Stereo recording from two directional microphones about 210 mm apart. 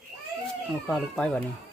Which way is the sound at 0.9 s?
5° left (ahead or behind).